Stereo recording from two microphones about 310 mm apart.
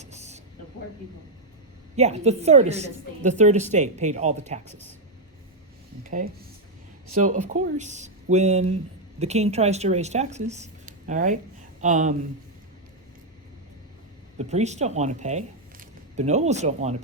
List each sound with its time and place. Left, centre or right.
0.0 s a sound: right
2.0 s speech: right
6.0 s speech: right
14.3 s speech: right